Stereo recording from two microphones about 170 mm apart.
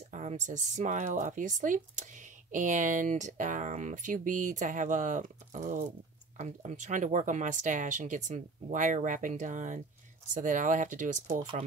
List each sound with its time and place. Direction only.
0.1 s speech: 45° right (ahead or behind)